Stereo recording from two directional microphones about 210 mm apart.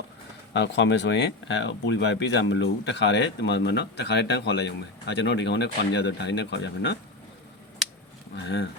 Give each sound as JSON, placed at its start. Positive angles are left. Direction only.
{"t": 0.5, "sound": "speech", "side_deg": 55}
{"t": 8.4, "sound": "speech", "side_deg": 55}